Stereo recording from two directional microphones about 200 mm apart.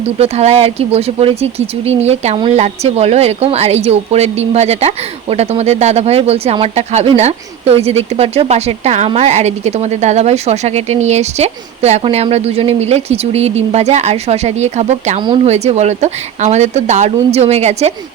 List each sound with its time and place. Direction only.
0.2 s speech: 35° right (ahead or behind)